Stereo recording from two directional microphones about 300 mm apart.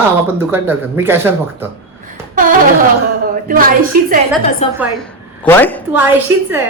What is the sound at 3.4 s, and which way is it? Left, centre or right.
Speech, right.